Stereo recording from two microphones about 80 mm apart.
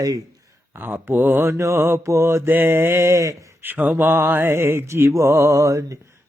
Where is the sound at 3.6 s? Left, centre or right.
Right.